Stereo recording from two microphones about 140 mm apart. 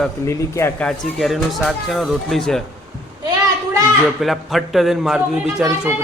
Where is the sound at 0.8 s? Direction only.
Centre (ahead or behind).